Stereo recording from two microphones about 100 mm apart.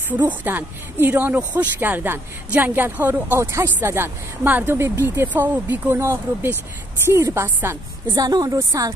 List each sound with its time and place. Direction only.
0.3 s a woman's voice: 20° right (ahead or behind)
8.1 s a woman's voice: 40° right (ahead or behind)